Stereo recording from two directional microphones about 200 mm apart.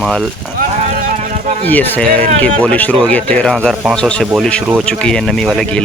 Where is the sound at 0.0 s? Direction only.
Centre (ahead or behind).